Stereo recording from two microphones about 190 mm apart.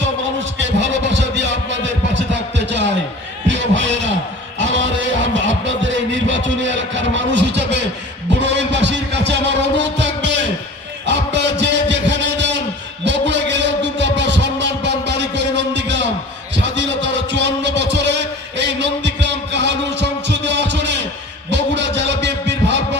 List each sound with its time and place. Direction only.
0.0 s heart sounds: 70° right (ahead or behind)
2.3 s music: 70° right (ahead or behind)
10.0 s a sound: 70° right (ahead or behind)
13.1 s music: 70° right (ahead or behind)
16.6 s heart murmur: 70° right (ahead or behind)
21.5 s a sound: 70° right (ahead or behind)